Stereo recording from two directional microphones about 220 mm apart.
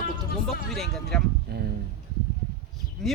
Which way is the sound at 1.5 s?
45° right (ahead or behind).